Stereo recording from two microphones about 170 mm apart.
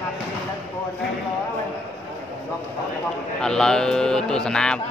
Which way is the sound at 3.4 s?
5° left (ahead or behind).